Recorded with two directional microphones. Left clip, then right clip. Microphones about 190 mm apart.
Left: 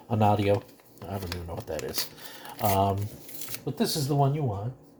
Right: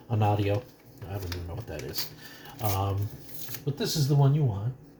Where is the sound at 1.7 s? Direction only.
50° left (ahead or behind).